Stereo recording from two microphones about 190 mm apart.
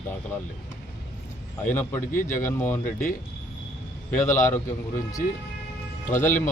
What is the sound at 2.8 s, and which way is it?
Speech, 45° left (ahead or behind).